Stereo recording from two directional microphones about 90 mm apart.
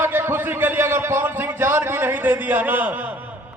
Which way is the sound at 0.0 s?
25° right (ahead or behind).